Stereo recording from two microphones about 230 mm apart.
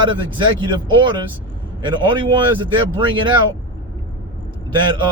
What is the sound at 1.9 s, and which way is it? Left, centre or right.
Speech, centre.